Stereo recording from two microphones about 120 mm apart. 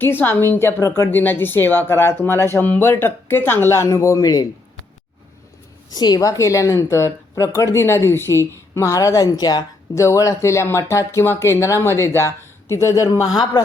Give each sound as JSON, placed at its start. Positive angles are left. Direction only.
{"t": 0.0, "sound": "a woman's voice", "side_deg": 15}
{"t": 5.9, "sound": "a woman's voice", "side_deg": 35}
{"t": 13.3, "sound": "speech", "side_deg": 35}